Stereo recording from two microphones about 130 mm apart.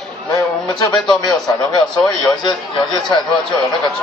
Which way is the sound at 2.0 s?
35° left (ahead or behind).